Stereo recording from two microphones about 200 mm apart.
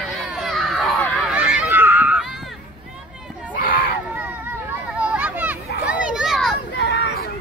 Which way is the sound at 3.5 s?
45° left (ahead or behind).